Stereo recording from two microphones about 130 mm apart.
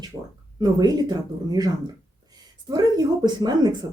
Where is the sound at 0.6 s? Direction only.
30° right (ahead or behind).